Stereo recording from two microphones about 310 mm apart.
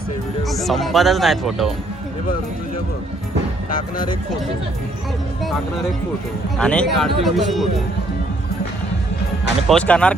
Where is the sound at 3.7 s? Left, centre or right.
Left.